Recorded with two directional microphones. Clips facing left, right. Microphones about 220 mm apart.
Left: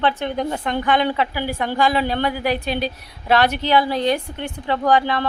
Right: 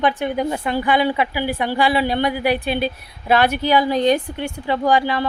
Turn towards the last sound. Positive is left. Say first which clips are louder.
# even
turn(degrees=-10)  # may be behind; listen again after turning